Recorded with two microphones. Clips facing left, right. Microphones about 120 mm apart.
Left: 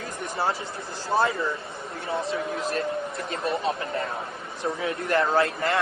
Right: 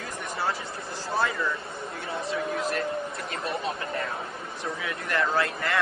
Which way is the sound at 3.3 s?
25° left (ahead or behind).